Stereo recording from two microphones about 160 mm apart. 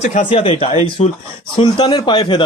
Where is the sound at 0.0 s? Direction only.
50° left (ahead or behind).